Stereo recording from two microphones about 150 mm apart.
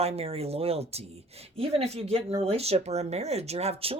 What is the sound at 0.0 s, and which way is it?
Speech, 40° right (ahead or behind).